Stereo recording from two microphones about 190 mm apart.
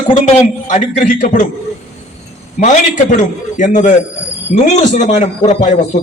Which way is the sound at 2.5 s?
40° left (ahead or behind).